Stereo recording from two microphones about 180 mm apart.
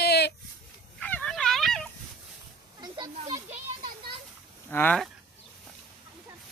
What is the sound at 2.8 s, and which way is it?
Children playing, 25° right (ahead or behind).